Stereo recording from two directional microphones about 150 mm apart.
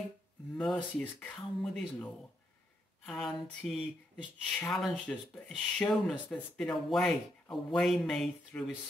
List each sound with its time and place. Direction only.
0.6 s speech: 5° left (ahead or behind)
3.1 s speech: centre (ahead or behind)
5.8 s speech: 10° left (ahead or behind)